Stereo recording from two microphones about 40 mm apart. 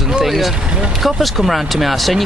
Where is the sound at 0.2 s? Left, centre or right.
Centre.